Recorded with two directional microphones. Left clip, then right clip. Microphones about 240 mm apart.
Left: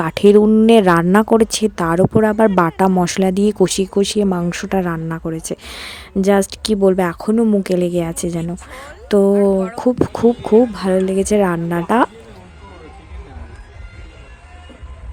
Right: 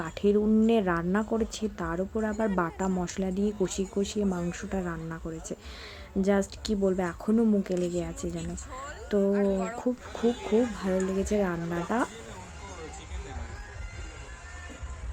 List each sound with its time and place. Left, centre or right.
0.0 s speech: left